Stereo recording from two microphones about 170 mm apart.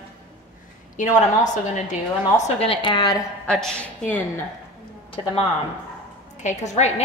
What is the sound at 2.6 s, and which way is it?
Speech, 30° left (ahead or behind).